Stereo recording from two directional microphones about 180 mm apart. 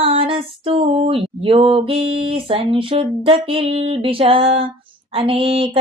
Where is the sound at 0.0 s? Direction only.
35° right (ahead or behind).